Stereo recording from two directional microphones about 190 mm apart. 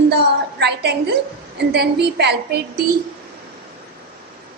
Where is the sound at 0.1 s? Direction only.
60° right (ahead or behind).